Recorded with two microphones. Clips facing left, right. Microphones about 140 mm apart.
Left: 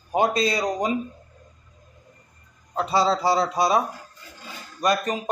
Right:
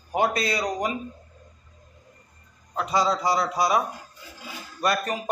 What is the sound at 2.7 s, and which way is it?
Speech, 30° left (ahead or behind).